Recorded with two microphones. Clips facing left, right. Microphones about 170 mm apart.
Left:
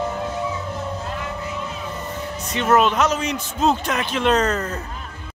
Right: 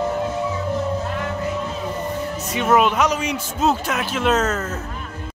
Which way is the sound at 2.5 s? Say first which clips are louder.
Even; 10° right (ahead or behind).